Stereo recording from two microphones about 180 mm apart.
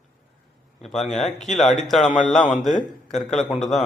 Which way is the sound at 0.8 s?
Centre (ahead or behind).